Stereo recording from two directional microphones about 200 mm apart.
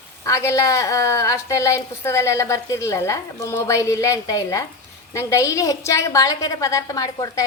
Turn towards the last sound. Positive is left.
turn(degrees=15)  # may be behind; listen again after turning